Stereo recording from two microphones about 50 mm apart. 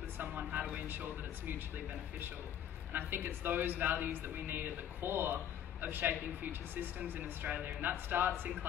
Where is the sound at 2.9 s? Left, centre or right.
Right.